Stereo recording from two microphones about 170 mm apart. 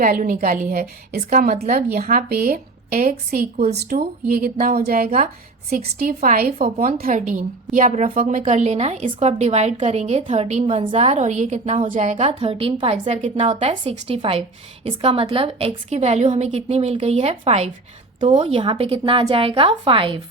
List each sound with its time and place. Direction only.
0.0 s a woman's voice: 55° right (ahead or behind)
6.7 s a woman's voice: 35° right (ahead or behind)
7.0 s a woman's voice: 50° right (ahead or behind); by 20.2 s 30° right (ahead or behind)